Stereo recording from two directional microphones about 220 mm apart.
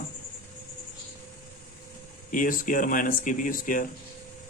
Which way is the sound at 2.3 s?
35° left (ahead or behind).